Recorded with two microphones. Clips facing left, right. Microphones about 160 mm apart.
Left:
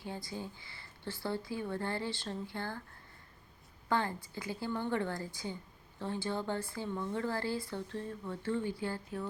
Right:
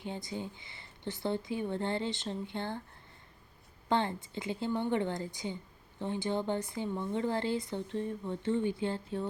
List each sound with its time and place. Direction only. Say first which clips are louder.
0.0 s speech: right 3 dB; 20° right (ahead or behind)
3.8 s speech: right 3 dB; 25° right (ahead or behind)